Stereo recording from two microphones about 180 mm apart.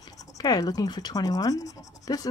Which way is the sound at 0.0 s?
20° left (ahead or behind).